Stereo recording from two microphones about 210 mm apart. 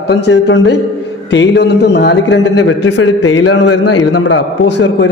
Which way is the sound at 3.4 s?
75° left (ahead or behind).